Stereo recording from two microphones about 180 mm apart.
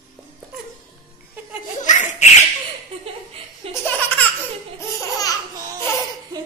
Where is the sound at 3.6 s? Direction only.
30° right (ahead or behind).